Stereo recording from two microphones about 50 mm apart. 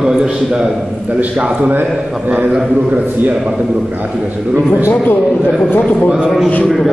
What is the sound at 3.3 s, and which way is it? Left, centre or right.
Speech, centre.